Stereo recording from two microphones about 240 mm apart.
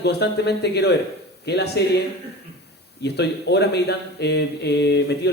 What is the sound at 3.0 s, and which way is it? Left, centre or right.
Speech, left.